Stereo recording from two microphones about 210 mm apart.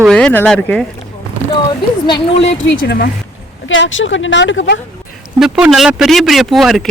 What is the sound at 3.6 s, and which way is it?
Speech, 65° left (ahead or behind).